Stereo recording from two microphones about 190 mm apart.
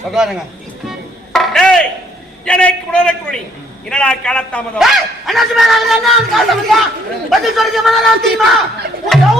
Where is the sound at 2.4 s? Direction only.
5° left (ahead or behind).